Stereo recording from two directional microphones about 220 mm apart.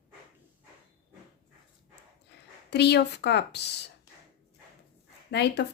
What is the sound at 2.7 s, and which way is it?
Speech, 50° left (ahead or behind).